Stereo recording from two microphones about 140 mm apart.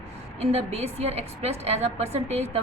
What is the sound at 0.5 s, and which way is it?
A woman's voice, 50° right (ahead or behind).